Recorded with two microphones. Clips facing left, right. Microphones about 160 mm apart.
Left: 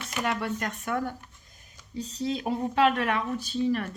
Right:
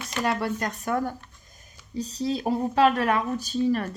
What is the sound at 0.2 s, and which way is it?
A woman's voice, 35° right (ahead or behind).